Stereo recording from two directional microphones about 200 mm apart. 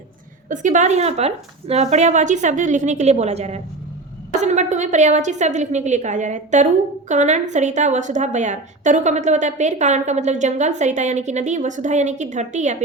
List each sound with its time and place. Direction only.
0.4 s a woman's voice: 40° right (ahead or behind)